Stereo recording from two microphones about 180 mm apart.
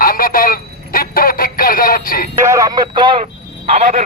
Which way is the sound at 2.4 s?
20° right (ahead or behind).